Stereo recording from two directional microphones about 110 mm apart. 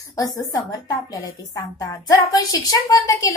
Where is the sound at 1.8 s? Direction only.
35° left (ahead or behind).